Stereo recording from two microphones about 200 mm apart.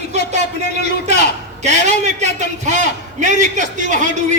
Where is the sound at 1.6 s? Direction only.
35° right (ahead or behind).